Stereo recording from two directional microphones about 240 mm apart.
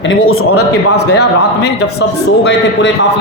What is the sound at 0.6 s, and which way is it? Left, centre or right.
A man's voice, left.